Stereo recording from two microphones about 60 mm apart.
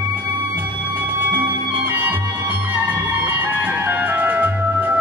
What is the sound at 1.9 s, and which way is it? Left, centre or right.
Music, right.